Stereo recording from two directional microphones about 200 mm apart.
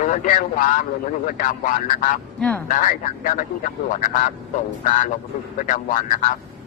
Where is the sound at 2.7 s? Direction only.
40° left (ahead or behind).